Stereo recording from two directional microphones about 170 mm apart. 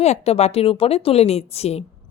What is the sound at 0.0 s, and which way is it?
A woman's voice, 40° left (ahead or behind).